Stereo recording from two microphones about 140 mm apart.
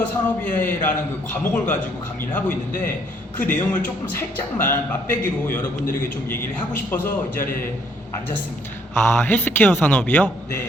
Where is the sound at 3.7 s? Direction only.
10° left (ahead or behind).